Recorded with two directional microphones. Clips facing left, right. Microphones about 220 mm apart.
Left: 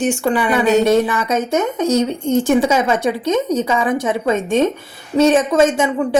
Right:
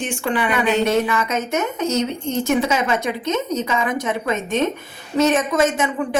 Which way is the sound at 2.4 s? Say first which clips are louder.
Left 4 dB; 30° left (ahead or behind).